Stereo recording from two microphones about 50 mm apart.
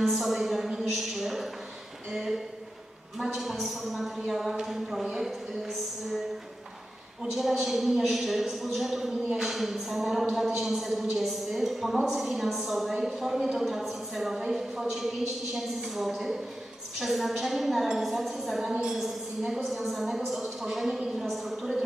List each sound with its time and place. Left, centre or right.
0.0 s a sound: centre
2.1 s a man's voice: centre
7.3 s a man's voice: centre